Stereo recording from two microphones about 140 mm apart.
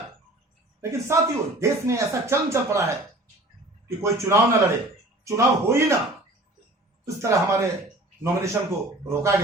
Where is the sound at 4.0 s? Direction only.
20° right (ahead or behind).